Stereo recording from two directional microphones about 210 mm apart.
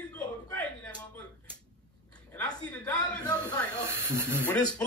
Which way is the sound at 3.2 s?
20° left (ahead or behind).